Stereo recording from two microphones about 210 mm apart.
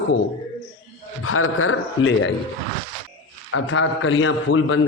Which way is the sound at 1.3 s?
90° left.